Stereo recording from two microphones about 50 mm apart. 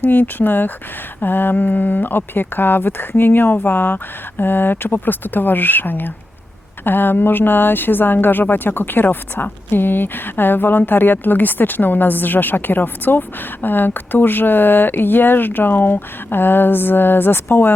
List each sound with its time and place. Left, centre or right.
0.0 s speech: left